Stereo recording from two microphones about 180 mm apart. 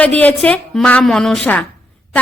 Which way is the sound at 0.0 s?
10° left (ahead or behind).